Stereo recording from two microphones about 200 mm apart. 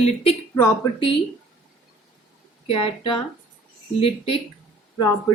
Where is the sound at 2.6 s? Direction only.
30° left (ahead or behind).